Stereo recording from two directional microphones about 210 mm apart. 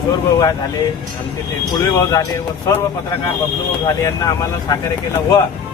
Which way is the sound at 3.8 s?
15° left (ahead or behind).